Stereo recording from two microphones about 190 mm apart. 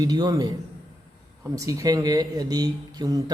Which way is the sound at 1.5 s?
15° right (ahead or behind).